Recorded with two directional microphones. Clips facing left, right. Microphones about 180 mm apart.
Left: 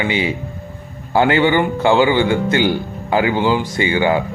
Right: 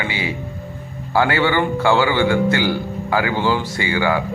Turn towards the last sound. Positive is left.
turn(degrees=20)  # may be behind; listen again after turning